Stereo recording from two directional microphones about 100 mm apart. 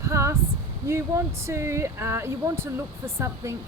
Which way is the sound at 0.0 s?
30° right (ahead or behind).